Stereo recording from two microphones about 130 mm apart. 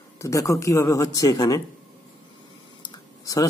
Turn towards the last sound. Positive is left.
turn(degrees=35)  # may be behind; listen again after turning